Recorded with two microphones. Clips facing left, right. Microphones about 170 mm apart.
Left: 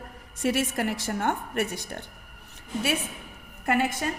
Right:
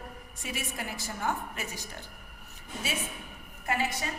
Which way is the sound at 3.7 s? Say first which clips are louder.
Left 6 dB; 55° left (ahead or behind).